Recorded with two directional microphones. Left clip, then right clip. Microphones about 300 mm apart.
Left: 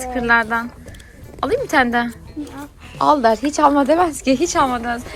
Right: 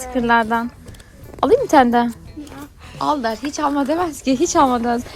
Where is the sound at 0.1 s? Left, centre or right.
Centre.